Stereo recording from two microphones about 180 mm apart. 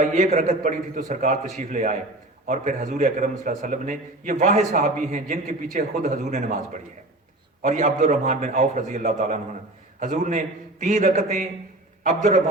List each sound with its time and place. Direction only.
0.0 s a man's voice: 45° right (ahead or behind)
7.6 s a man's voice: 40° right (ahead or behind)